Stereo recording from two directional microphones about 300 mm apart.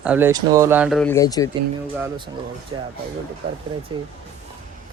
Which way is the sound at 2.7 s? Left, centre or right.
Centre.